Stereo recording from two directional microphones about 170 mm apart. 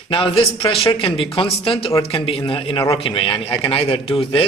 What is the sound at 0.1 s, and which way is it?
A man's voice, 30° left (ahead or behind).